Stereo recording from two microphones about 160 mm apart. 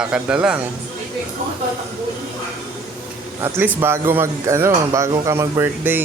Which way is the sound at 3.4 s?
15° right (ahead or behind).